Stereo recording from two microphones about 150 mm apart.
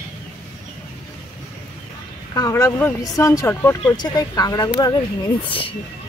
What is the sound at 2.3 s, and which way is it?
Speech, 25° left (ahead or behind).